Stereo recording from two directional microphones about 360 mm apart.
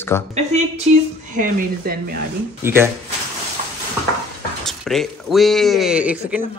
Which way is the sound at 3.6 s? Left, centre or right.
Centre.